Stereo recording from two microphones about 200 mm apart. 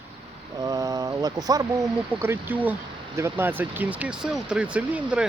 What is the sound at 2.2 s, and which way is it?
Speech, 10° right (ahead or behind).